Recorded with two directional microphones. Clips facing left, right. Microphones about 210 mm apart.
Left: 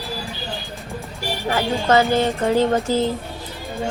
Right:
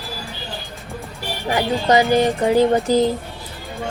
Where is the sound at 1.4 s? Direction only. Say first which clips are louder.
Right 1 dB; 15° right (ahead or behind).